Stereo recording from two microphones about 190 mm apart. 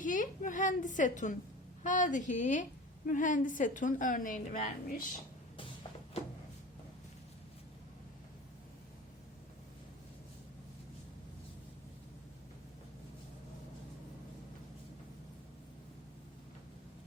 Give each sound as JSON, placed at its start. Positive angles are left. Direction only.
{"t": 0.0, "sound": "a woman's voice", "side_deg": 45}